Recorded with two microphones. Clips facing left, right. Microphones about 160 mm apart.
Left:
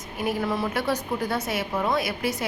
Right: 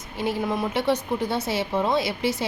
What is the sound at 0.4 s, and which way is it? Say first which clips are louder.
A woman's voice: right 4 dB; 20° right (ahead or behind).